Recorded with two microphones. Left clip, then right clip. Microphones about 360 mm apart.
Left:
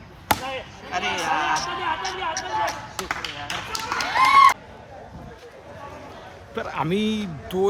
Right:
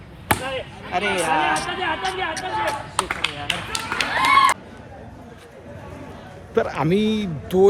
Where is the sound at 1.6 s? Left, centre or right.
Centre.